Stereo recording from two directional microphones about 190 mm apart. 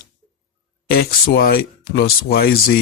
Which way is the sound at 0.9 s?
55° left (ahead or behind).